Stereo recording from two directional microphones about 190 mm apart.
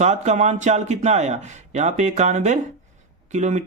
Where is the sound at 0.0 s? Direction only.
35° right (ahead or behind).